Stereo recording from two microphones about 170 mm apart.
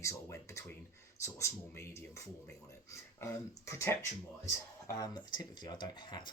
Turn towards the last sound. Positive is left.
turn(degrees=25)  # may be behind; listen again after turning